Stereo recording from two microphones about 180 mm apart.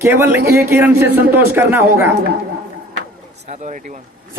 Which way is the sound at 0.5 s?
15° right (ahead or behind).